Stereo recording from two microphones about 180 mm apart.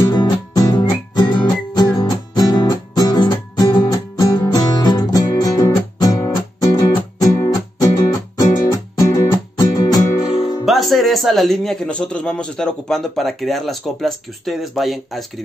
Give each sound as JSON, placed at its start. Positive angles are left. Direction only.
{"t": 0.0, "sound": "music", "side_deg": 20}
{"t": 8.9, "sound": "music", "side_deg": 15}
{"t": 10.6, "sound": "speech", "side_deg": 0}